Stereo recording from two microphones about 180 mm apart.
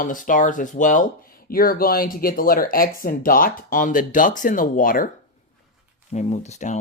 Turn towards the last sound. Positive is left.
turn(degrees=40)  # may be behind; listen again after turning